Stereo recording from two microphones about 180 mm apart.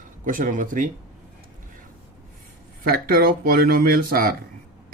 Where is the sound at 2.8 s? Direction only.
55° right (ahead or behind).